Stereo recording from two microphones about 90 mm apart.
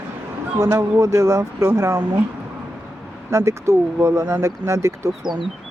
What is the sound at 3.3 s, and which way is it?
Speech, 35° right (ahead or behind).